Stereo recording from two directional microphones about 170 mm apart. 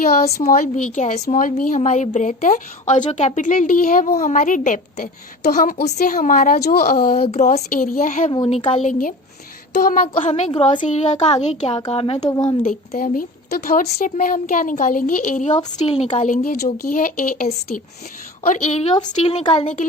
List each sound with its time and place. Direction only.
0.3 s a woman's voice: 55° left (ahead or behind)
7.2 s a woman's voice: 40° left (ahead or behind)
8.4 s speech: 35° left (ahead or behind)
8.8 s a woman's voice: 50° left (ahead or behind)
10.2 s speech: 40° left (ahead or behind)
10.8 s speech: 45° left (ahead or behind); by 12.5 s 20° left (ahead or behind)
12.6 s a woman's voice: 55° left (ahead or behind)
16.1 s a woman's voice: 50° left (ahead or behind)
18.4 s a woman's voice: 45° left (ahead or behind)
19.1 s speech: 35° left (ahead or behind)